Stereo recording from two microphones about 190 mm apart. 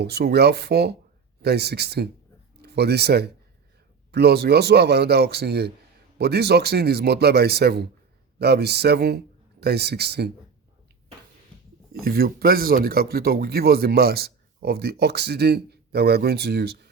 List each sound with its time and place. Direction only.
0.0 s speech: 60° right (ahead or behind)
12.0 s speech: 55° right (ahead or behind)